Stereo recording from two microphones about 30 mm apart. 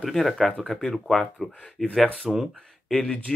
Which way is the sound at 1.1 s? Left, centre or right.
Left.